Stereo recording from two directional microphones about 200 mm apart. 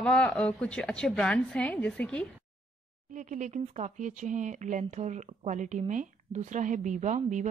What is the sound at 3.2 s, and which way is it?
Speech, 40° right (ahead or behind).